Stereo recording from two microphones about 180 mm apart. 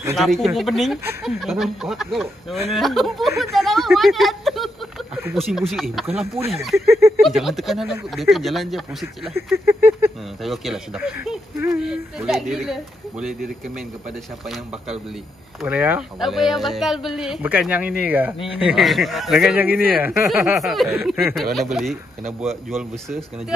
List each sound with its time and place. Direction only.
0.1 s speech: centre (ahead or behind)
6.9 s a sound: 15° right (ahead or behind)
7.2 s speech: centre (ahead or behind)
9.7 s a sound: 10° right (ahead or behind)
10.4 s speech: centre (ahead or behind)
15.6 s speech: 10° right (ahead or behind)
22.7 s speech: centre (ahead or behind)